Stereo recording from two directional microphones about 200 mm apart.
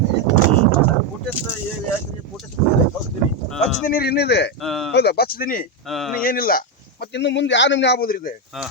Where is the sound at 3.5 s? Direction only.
Centre (ahead or behind).